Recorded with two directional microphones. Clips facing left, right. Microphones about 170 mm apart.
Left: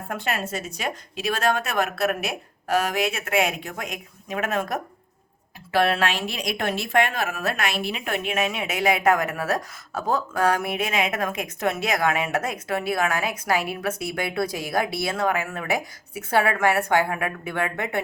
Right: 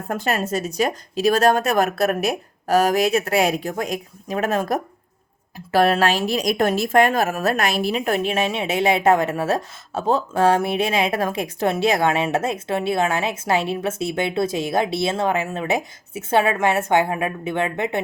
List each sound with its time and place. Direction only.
0.1 s a woman's voice: 40° right (ahead or behind); by 18.0 s 20° right (ahead or behind)